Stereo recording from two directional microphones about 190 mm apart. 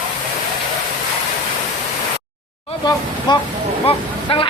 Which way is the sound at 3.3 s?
25° left (ahead or behind).